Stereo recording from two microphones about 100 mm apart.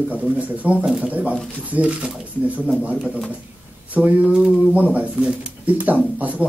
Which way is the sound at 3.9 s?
15° right (ahead or behind).